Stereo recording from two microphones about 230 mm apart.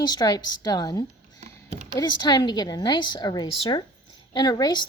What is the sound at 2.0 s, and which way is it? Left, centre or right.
A woman's voice, centre.